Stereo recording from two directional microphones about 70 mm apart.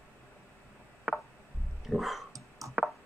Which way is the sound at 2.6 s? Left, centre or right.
Right.